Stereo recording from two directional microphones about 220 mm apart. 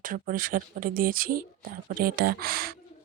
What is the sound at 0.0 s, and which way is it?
Speech, 40° right (ahead or behind).